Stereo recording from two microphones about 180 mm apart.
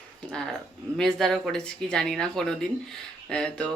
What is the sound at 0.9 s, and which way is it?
Speech, 5° left (ahead or behind).